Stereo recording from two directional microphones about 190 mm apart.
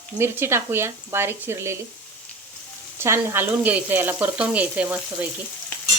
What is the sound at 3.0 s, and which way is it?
Speech, 15° right (ahead or behind).